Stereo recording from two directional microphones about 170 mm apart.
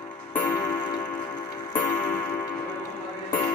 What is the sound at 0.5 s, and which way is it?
Tick-tock, 10° left (ahead or behind).